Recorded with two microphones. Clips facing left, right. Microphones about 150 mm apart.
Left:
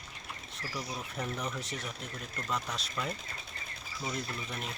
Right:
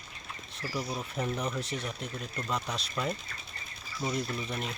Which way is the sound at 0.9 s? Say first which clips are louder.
Right 3 dB; 20° right (ahead or behind).